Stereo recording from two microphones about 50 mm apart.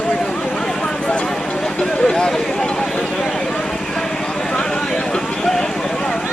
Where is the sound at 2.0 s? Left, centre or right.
Centre.